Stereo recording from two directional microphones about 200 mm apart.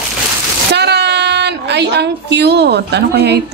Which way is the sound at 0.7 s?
55° right (ahead or behind).